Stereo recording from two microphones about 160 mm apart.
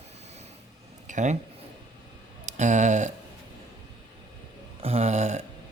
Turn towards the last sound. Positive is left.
turn(degrees=-45)  # may be behind; listen again after turning